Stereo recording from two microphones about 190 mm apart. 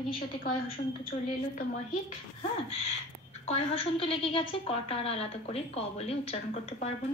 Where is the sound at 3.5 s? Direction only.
30° left (ahead or behind).